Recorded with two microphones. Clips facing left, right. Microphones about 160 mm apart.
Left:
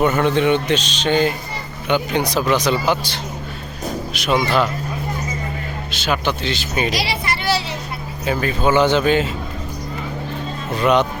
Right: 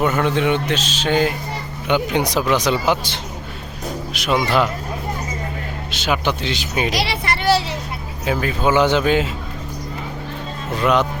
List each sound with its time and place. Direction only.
0.0 s speech: 5° right (ahead or behind); by 3.2 s 20° right (ahead or behind)
4.1 s speech: 5° right (ahead or behind)
5.9 s speech: 15° right (ahead or behind)
7.0 s a sound: 60° right (ahead or behind)
8.2 s speech: 5° right (ahead or behind)
10.8 s speech: 5° right (ahead or behind)